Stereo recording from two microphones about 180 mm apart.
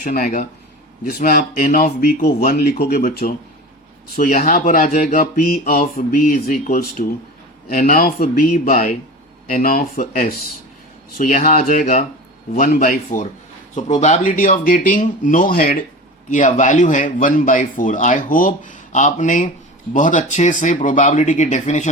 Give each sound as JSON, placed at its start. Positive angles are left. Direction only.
{"t": 0.0, "sound": "speech", "side_deg": 45}
{"t": 4.2, "sound": "speech", "side_deg": 45}
{"t": 8.7, "sound": "speech", "side_deg": 40}
{"t": 9.5, "sound": "speech", "side_deg": 50}